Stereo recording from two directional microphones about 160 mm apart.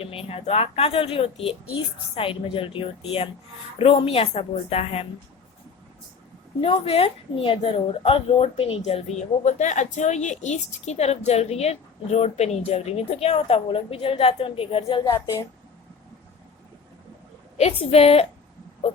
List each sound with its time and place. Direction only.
0.0 s speech: 35° left (ahead or behind)
6.6 s speech: 35° left (ahead or behind)
15.0 s a woman's voice: 20° left (ahead or behind)
17.6 s speech: 40° left (ahead or behind)